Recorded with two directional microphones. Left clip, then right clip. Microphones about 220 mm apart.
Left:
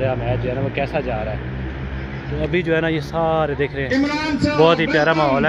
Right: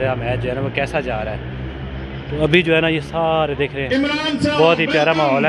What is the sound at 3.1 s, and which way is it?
Speech, centre (ahead or behind).